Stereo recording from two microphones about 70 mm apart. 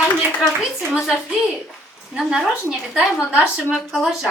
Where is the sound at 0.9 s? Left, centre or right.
Centre.